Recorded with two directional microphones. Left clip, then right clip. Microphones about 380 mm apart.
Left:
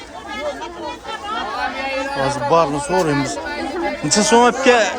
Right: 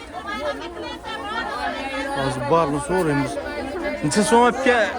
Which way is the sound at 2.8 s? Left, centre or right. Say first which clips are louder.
Left 4 dB; centre.